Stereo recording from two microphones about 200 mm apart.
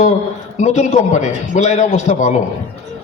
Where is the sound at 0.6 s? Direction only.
35° left (ahead or behind).